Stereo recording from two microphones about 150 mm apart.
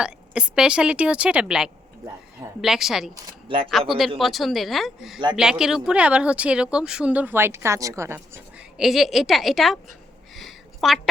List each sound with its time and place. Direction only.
0.0 s speech: 5° right (ahead or behind)
8.8 s speech: centre (ahead or behind)
10.3 s a sound: centre (ahead or behind)